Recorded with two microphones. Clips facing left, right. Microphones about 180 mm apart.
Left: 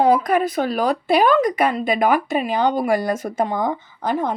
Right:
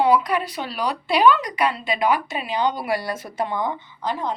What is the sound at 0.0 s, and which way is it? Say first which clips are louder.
Speech: left 3 dB; 45° left (ahead or behind).